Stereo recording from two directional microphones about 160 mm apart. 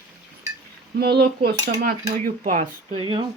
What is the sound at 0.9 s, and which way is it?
Speech, 80° right.